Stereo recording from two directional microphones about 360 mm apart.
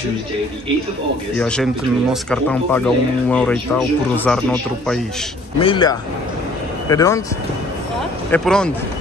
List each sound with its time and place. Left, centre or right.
1.4 s speech: centre
5.6 s speech: centre
8.3 s speech: centre